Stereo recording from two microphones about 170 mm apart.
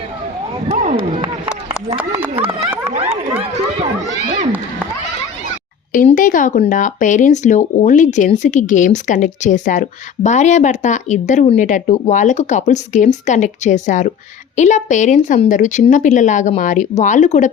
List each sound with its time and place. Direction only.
0.7 s a sound: 45° right (ahead or behind)
2.8 s run: 35° right (ahead or behind)
6.1 s speech: 50° left (ahead or behind)